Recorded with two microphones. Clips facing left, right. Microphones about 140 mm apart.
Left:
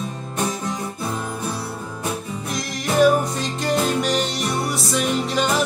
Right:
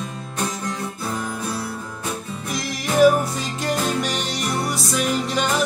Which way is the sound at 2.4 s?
Centre (ahead or behind).